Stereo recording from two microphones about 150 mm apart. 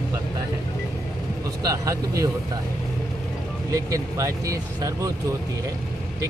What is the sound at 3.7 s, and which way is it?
Speech, 20° right (ahead or behind).